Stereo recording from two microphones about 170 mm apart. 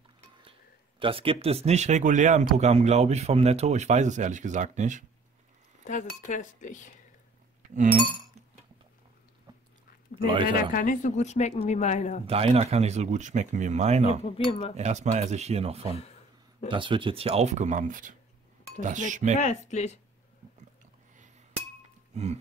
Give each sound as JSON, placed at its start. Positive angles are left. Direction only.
{"t": 0.4, "sound": "speech", "side_deg": -30}
{"t": 5.9, "sound": "a woman's voice", "side_deg": 45}
{"t": 10.1, "sound": "a sound", "side_deg": 45}
{"t": 10.7, "sound": "a woman's voice", "side_deg": 50}
{"t": 12.3, "sound": "speech", "side_deg": -35}
{"t": 14.2, "sound": "speech", "side_deg": 35}
{"t": 14.8, "sound": "speech", "side_deg": -45}
{"t": 19.3, "sound": "a woman's voice", "side_deg": 45}
{"t": 22.1, "sound": "music", "side_deg": -40}